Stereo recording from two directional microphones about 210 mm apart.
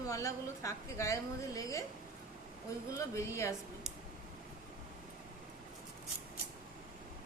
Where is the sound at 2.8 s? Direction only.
15° left (ahead or behind).